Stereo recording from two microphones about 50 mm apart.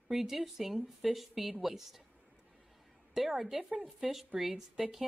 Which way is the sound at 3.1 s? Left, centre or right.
Centre.